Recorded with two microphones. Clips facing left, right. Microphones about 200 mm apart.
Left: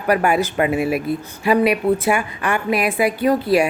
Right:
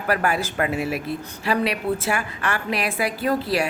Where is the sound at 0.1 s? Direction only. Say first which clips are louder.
Left 6 dB; 15° left (ahead or behind).